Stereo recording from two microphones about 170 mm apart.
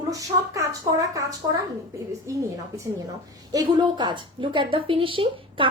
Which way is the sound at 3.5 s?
25° right (ahead or behind).